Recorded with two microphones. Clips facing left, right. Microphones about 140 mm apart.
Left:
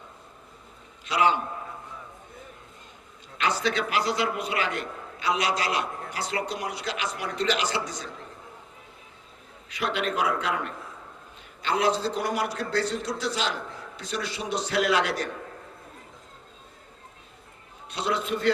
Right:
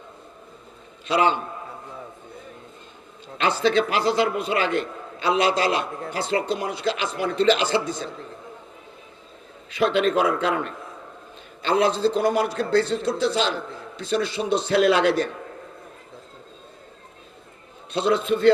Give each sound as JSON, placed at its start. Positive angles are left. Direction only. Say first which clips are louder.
{"t": 1.0, "sound": "a man's voice", "louder": "right 3 dB", "side_deg": -30}
{"t": 3.3, "sound": "a man's voice", "louder": "right 6 dB", "side_deg": -30}
{"t": 9.6, "sound": "a man's voice", "louder": "right 8 dB", "side_deg": -30}
{"t": 17.9, "sound": "a man's voice", "louder": "right 7 dB", "side_deg": -25}